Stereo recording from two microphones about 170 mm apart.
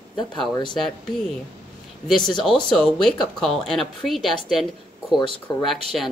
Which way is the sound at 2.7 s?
5° left (ahead or behind).